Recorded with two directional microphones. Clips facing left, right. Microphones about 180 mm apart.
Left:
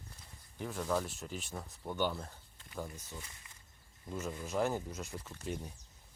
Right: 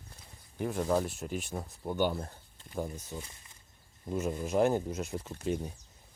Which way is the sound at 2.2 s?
30° right (ahead or behind).